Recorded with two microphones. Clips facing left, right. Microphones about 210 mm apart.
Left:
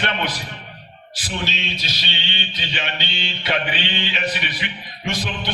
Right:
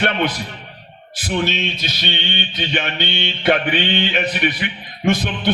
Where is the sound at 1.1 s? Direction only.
55° right (ahead or behind).